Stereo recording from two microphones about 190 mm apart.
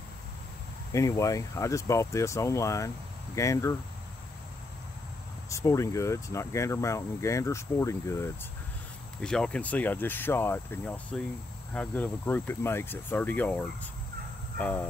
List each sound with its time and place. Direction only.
0.9 s speech: 15° left (ahead or behind)
5.5 s speech: 15° left (ahead or behind)
9.2 s speech: 5° left (ahead or behind)